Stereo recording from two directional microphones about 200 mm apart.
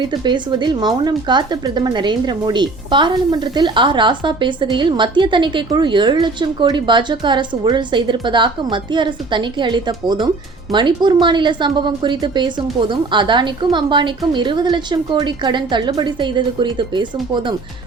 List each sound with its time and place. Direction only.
0.1 s speech: 20° right (ahead or behind)